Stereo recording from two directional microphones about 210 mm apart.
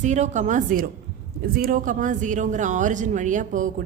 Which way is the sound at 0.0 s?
35° right (ahead or behind).